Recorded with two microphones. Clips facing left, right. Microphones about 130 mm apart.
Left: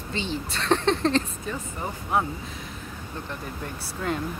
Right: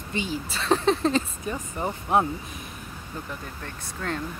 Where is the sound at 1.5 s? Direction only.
20° right (ahead or behind).